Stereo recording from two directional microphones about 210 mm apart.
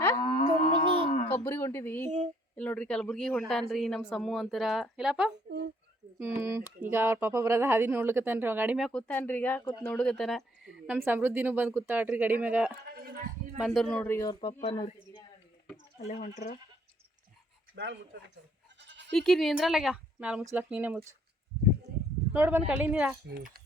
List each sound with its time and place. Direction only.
0.0 s music: 20° left (ahead or behind)
1.0 s a sound: 35° left (ahead or behind)
1.3 s speech: 15° left (ahead or behind)
2.0 s a sound: 35° right (ahead or behind)
2.6 s speech: 5° left (ahead or behind)
8.9 s a man's voice: 5° left (ahead or behind)
12.9 s a sound: 45° right (ahead or behind)
13.6 s a man's voice: centre (ahead or behind); by 14.9 s 25° left (ahead or behind)
16.0 s speech: 35° left (ahead or behind)
17.8 s speech: 60° right (ahead or behind)
18.9 s bleat: 55° right (ahead or behind)
19.1 s speech: centre (ahead or behind)
22.3 s speech: 10° right (ahead or behind)